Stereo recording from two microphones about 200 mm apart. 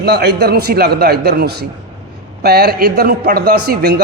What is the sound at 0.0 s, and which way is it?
A man's voice, 55° right (ahead or behind).